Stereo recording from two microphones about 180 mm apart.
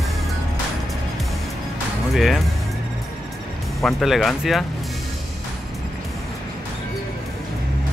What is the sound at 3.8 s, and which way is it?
Speech, centre (ahead or behind).